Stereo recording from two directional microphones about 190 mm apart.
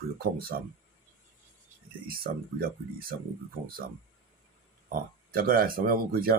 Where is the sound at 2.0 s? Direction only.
50° right (ahead or behind).